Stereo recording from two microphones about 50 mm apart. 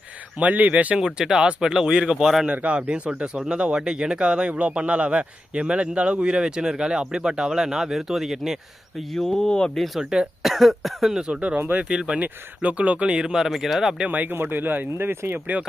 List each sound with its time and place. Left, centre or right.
0.3 s speech: right
0.9 s speech: centre
2.6 s speech: right; by 8.5 s centre
9.1 s speech: centre
9.5 s speech: centre
9.7 s cough: centre
10.0 s speech: centre
10.5 s cough: centre
11.1 s speech: centre
11.3 s speech: right
11.9 s speech: centre
12.2 s speech: right; by 13.9 s centre
14.1 s speech: right